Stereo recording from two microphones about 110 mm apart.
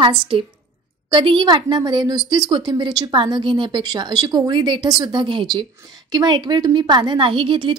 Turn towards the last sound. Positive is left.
turn(degrees=-50)  # may be behind; listen again after turning